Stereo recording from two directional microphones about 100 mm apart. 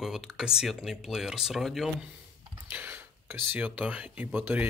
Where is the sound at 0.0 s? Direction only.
5° right (ahead or behind).